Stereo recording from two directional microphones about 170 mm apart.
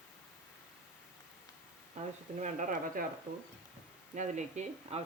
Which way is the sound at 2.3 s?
45° right (ahead or behind).